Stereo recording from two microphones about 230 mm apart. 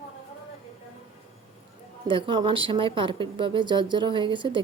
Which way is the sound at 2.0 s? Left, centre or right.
Right.